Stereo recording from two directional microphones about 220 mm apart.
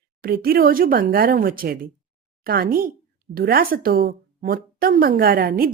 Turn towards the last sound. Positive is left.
turn(degrees=-40)  # may be behind; listen again after turning